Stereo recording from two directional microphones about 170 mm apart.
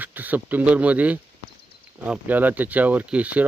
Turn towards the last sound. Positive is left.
turn(degrees=-10)  # may be behind; listen again after turning